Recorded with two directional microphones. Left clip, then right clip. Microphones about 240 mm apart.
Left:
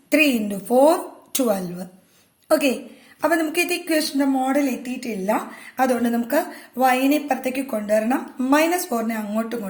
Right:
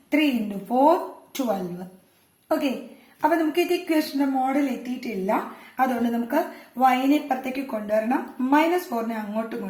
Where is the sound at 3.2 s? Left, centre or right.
Left.